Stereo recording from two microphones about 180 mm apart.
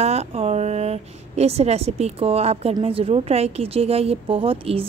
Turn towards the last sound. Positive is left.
turn(degrees=-30)  # may be behind; listen again after turning